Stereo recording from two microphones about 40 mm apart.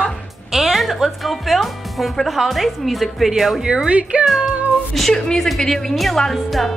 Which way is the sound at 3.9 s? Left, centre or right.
Right.